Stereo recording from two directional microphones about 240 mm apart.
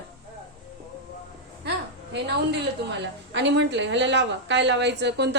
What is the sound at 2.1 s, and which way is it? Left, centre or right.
A woman's voice, right.